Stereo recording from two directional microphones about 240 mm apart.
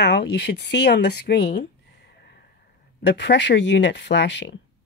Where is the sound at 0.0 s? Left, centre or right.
Left.